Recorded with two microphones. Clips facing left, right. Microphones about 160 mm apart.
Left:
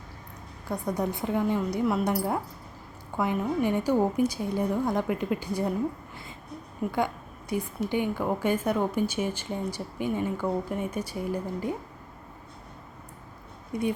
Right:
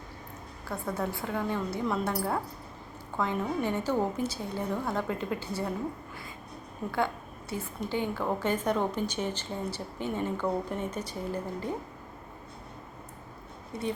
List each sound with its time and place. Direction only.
0.7 s a woman's voice: 15° left (ahead or behind)
6.8 s a woman's voice: 15° left (ahead or behind)
13.7 s a woman's voice: 15° left (ahead or behind)